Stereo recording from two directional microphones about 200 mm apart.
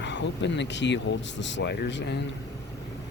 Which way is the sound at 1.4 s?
65° left (ahead or behind).